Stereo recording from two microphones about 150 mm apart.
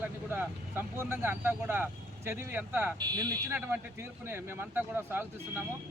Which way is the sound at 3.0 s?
25° right (ahead or behind).